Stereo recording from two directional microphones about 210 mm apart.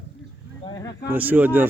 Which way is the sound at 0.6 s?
20° left (ahead or behind).